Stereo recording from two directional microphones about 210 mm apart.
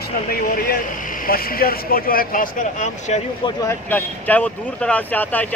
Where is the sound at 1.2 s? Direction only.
45° left (ahead or behind).